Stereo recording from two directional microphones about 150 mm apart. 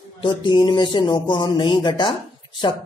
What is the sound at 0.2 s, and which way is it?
Speech, 30° left (ahead or behind).